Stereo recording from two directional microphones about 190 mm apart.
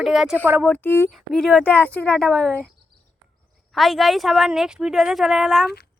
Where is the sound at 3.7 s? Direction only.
Centre (ahead or behind).